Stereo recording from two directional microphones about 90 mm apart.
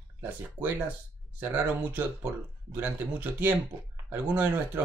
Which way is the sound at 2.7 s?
20° right (ahead or behind).